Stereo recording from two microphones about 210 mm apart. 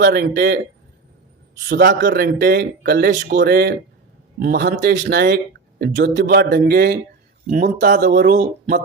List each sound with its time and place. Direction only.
0.0 s a man's voice: 50° right (ahead or behind)